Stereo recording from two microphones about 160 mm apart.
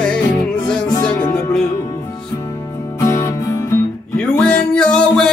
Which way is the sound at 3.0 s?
15° left (ahead or behind).